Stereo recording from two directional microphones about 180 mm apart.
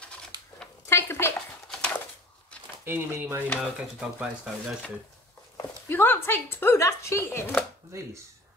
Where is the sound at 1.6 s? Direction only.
5° left (ahead or behind).